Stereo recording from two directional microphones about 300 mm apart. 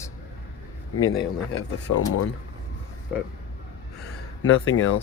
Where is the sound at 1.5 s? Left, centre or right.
Left.